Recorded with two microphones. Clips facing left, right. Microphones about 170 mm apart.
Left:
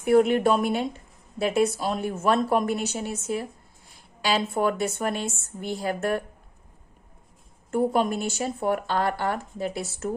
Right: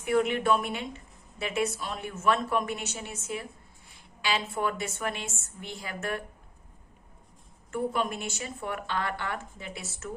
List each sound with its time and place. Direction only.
0.0 s speech: 40° left (ahead or behind)
7.7 s speech: 35° left (ahead or behind)